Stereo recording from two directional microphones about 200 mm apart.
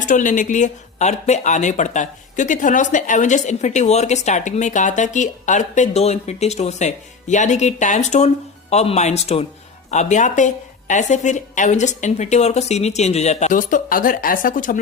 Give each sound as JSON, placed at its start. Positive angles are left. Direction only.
{"t": 0.0, "sound": "speech", "side_deg": 40}